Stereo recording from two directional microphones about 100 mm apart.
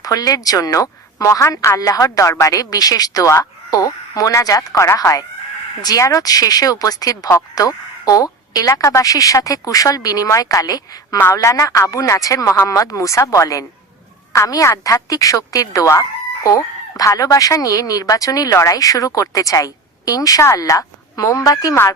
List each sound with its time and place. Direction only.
0.0 s speech: 40° left (ahead or behind)